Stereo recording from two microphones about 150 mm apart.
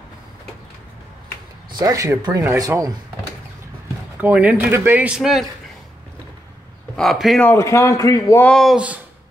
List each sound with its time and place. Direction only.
1.8 s speech: 20° right (ahead or behind)
4.2 s speech: 10° right (ahead or behind)
7.0 s speech: centre (ahead or behind)
7.4 s a man's voice: 20° left (ahead or behind)
8.5 s speech: 5° left (ahead or behind)
8.7 s speech: 10° right (ahead or behind)